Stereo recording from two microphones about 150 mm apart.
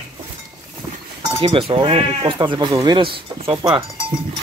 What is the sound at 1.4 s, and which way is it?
Speech, 35° right (ahead or behind).